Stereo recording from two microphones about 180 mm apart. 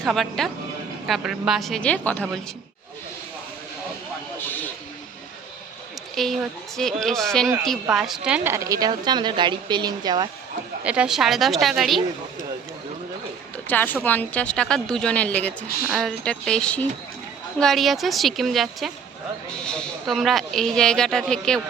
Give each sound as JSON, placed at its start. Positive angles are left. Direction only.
{"t": 0.0, "sound": "speech", "side_deg": 0}
{"t": 6.2, "sound": "speech", "side_deg": 0}
{"t": 10.8, "sound": "speech", "side_deg": -5}
{"t": 13.7, "sound": "speech", "side_deg": 10}